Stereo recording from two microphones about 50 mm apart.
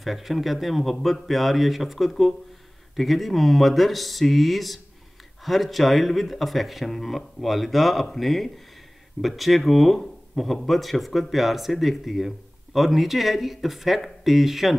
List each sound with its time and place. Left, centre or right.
0.0 s speech: centre